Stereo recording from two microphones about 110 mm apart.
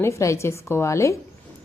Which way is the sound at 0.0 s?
25° left (ahead or behind).